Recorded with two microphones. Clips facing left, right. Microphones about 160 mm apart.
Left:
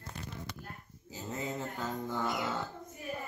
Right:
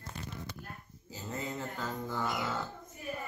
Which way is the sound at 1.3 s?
20° left (ahead or behind).